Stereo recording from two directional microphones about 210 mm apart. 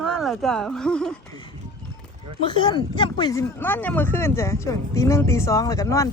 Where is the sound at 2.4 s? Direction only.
20° left (ahead or behind).